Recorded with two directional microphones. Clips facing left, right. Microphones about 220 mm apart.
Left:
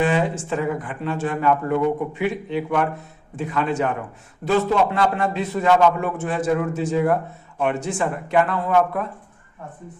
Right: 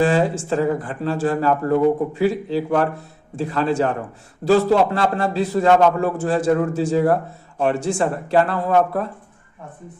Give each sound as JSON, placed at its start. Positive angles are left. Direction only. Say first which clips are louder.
{"t": 0.0, "sound": "speech", "louder": "right 3 dB", "side_deg": -35}